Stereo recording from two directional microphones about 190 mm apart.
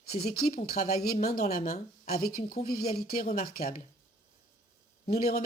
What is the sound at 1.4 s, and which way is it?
Speech, 35° left (ahead or behind).